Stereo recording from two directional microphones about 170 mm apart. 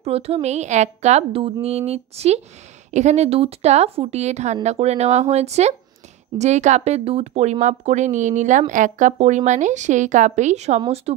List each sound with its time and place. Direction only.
0.0 s a woman's voice: 35° right (ahead or behind)